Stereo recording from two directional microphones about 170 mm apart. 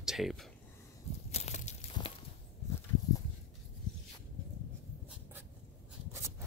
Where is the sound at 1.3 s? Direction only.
40° left (ahead or behind).